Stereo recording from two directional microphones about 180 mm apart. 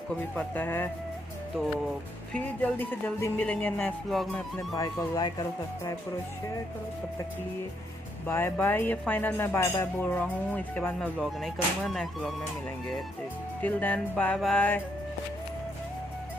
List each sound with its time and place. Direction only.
0.1 s speech: 10° left (ahead or behind)
2.3 s speech: 10° left (ahead or behind)
4.7 s speech: 20° left (ahead or behind)
8.3 s speech: 15° left (ahead or behind)
13.6 s speech: 10° left (ahead or behind)